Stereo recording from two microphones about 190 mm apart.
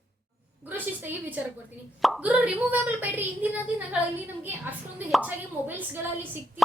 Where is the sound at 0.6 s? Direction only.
10° right (ahead or behind).